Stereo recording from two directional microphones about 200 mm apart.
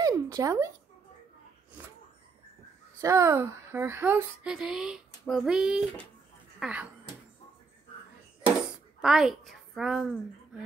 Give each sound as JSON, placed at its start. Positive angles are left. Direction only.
{"t": 0.0, "sound": "a sound", "side_deg": -15}
{"t": 3.0, "sound": "speech", "side_deg": -15}
{"t": 5.2, "sound": "child singing", "side_deg": 0}
{"t": 6.6, "sound": "speech", "side_deg": -5}
{"t": 9.0, "sound": "a woman's voice", "side_deg": 0}